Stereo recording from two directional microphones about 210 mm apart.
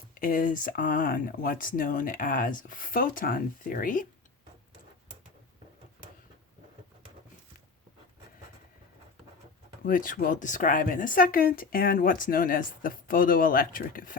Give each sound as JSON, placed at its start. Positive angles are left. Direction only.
{"t": 0.1, "sound": "speech", "side_deg": 40}
{"t": 9.8, "sound": "speech", "side_deg": 40}